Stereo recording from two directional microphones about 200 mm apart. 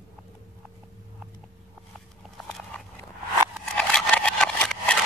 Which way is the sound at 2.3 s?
5° left (ahead or behind).